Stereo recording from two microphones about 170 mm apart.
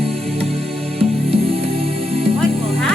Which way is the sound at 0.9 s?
35° right (ahead or behind).